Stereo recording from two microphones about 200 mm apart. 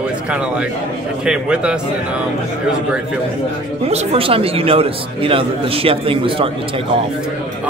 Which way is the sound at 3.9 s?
30° right (ahead or behind).